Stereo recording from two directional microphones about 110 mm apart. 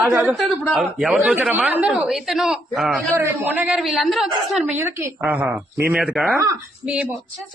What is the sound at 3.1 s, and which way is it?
A man's voice, 15° right (ahead or behind).